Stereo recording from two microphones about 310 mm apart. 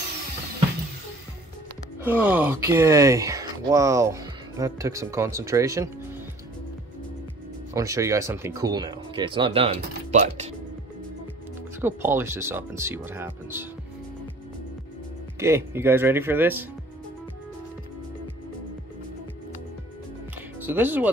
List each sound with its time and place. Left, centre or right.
2.0 s speech: centre
7.7 s speech: centre
11.8 s speech: centre
15.3 s speech: centre
20.6 s speech: centre